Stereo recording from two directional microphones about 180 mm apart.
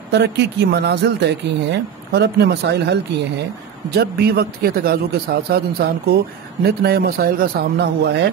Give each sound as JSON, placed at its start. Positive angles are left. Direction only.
{"t": 0.1, "sound": "a man's voice", "side_deg": -70}